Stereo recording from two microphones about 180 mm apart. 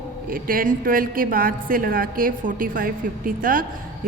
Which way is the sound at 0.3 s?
50° right (ahead or behind).